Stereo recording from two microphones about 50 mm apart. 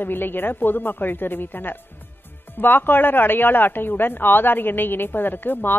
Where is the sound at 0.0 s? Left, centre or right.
Left.